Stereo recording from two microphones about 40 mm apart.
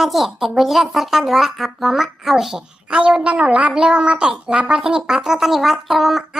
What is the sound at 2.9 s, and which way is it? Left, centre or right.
A woman's voice, right.